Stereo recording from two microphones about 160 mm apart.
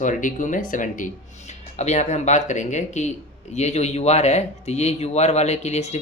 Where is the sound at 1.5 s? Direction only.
45° left (ahead or behind).